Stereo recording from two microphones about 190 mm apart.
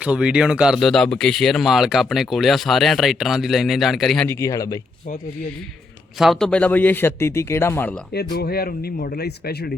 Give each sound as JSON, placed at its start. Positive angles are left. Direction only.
{"t": 0.0, "sound": "speech", "side_deg": -5}
{"t": 4.3, "sound": "a man's voice", "side_deg": 15}
{"t": 6.1, "sound": "a man's voice", "side_deg": 0}
{"t": 8.1, "sound": "speech", "side_deg": 55}